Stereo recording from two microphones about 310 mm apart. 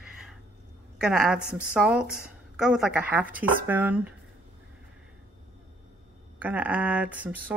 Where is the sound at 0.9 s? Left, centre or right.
Centre.